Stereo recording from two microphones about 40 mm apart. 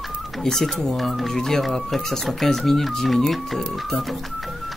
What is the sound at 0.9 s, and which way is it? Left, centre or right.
Speech, centre.